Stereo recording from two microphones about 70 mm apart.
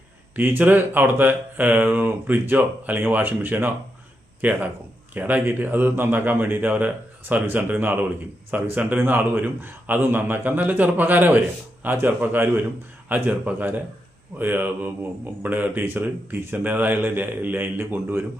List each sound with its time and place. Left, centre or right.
0.3 s speech: right